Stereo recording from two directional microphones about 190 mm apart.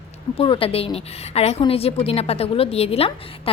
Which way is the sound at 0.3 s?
30° left (ahead or behind).